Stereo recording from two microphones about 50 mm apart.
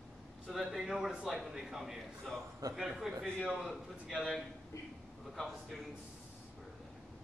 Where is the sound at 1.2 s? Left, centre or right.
Centre.